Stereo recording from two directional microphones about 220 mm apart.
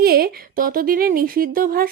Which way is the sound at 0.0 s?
45° right (ahead or behind).